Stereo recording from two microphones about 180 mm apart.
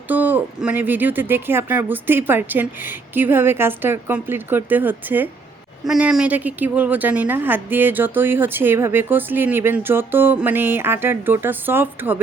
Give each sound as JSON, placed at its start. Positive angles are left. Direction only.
{"t": 0.1, "sound": "a woman's voice", "side_deg": -10}